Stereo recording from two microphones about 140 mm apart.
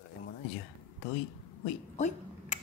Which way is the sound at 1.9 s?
55° left (ahead or behind).